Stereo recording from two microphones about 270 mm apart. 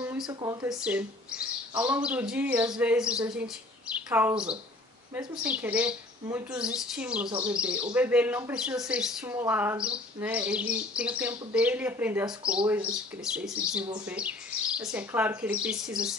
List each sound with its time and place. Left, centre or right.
0.0 s a woman's voice: centre
7.2 s speech: centre
7.5 s a woman's voice: centre